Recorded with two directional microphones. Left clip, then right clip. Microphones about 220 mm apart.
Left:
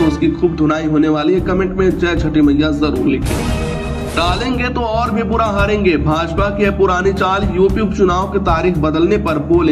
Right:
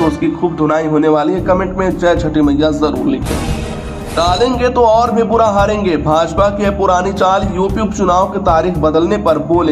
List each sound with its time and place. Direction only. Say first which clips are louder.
0.7 s a man's voice: right 6 dB; 20° left (ahead or behind)
2.4 s speech: right 1 dB; centre (ahead or behind)
4.2 s a man's voice: right 5 dB; 25° left (ahead or behind)
8.0 s speech: right 3 dB; 5° left (ahead or behind)
8.5 s a man's voice: right 3 dB; 25° left (ahead or behind)
8.9 s speech: right 3 dB; centre (ahead or behind)